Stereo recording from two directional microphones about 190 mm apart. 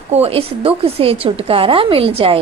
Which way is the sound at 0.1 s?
30° right (ahead or behind).